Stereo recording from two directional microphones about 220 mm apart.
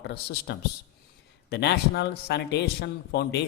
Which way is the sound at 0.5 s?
50° left (ahead or behind).